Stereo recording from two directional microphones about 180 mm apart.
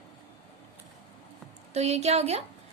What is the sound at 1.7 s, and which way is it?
Speech, 35° right (ahead or behind).